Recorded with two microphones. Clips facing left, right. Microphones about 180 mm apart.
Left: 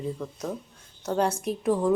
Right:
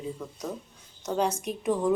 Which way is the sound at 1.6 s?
Centre (ahead or behind).